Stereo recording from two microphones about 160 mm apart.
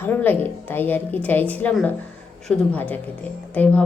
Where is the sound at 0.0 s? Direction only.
10° left (ahead or behind).